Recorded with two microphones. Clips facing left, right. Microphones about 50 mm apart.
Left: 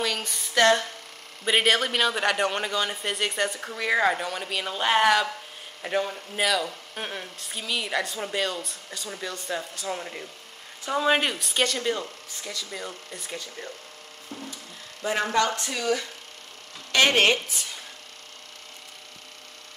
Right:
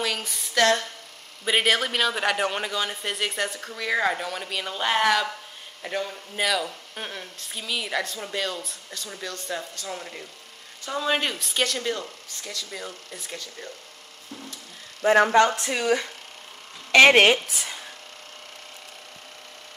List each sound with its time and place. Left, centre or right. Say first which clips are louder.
0.0 s a sound: even; centre
1.4 s a man's voice: even; centre
15.0 s speech: right 9 dB; right
15.4 s speech: right 3 dB; right